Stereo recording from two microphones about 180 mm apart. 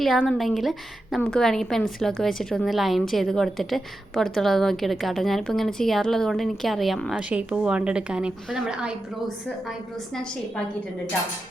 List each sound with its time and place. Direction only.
0.0 s a woman's voice: centre (ahead or behind)